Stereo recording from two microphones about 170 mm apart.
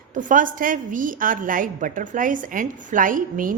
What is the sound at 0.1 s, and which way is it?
A woman's voice, 50° right (ahead or behind).